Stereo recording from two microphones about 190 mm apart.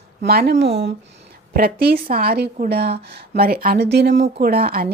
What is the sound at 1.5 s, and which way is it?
Speech, 50° right (ahead or behind).